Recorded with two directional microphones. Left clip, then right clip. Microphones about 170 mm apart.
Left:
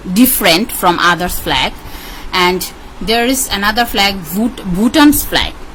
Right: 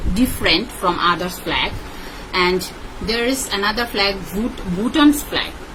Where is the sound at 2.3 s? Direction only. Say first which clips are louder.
Left 5 dB; 70° left (ahead or behind).